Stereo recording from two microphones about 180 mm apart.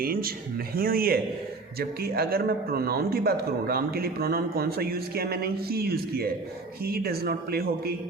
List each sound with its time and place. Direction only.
0.0 s a man's voice: 55° right (ahead or behind)